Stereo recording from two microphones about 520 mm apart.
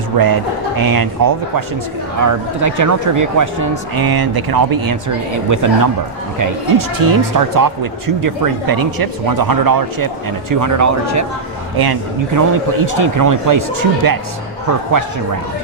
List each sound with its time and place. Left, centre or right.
0.1 s speech: right